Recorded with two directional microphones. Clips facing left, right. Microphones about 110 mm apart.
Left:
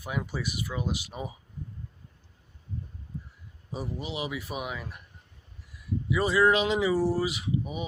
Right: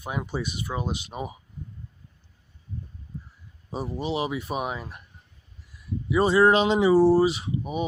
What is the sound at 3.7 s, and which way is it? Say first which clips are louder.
Speech: right 6 dB; 30° right (ahead or behind).